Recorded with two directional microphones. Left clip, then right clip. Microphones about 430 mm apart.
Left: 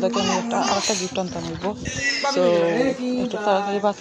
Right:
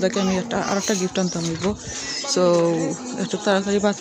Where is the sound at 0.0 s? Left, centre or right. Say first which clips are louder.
Left 1 dB; centre.